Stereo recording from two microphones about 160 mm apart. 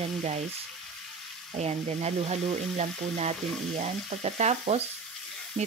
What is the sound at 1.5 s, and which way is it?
Speech, 40° right (ahead or behind).